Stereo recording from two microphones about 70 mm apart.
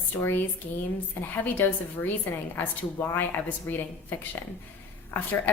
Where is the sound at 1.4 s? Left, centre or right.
Left.